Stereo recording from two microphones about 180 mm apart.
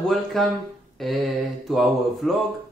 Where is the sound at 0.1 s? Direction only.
Centre (ahead or behind).